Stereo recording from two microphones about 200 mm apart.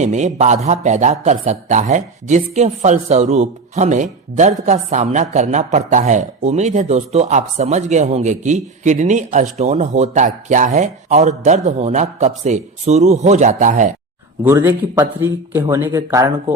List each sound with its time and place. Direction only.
0.0 s speech: 35° right (ahead or behind)
14.4 s speech: 10° right (ahead or behind)